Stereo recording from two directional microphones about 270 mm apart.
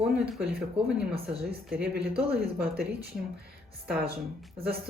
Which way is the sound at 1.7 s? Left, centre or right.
Right.